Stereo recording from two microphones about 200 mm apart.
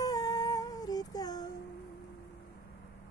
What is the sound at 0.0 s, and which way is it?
Music, 20° left (ahead or behind).